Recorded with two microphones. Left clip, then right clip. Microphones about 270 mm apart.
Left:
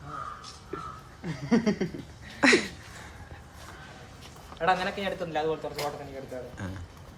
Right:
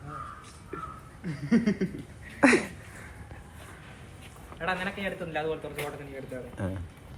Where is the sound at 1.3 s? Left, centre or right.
Left.